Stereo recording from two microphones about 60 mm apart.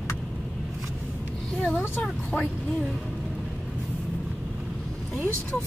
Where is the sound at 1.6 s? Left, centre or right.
Left.